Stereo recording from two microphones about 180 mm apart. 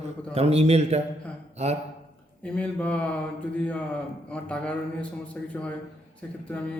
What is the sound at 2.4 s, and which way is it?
Speech, 5° left (ahead or behind).